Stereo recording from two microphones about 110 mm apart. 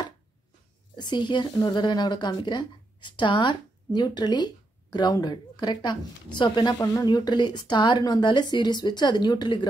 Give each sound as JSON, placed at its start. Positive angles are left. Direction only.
{"t": 0.9, "sound": "speech", "side_deg": 45}
{"t": 6.8, "sound": "speech", "side_deg": 30}